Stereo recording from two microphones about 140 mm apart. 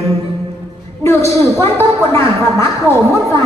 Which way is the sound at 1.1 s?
20° left (ahead or behind).